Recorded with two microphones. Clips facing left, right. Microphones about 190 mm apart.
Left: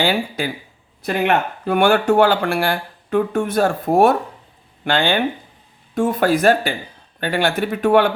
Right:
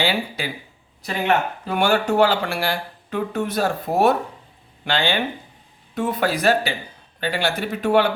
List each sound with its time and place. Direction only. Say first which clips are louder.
0.0 s speech: left 4 dB; 50° left (ahead or behind)
1.6 s speech: left 7 dB; 55° left (ahead or behind)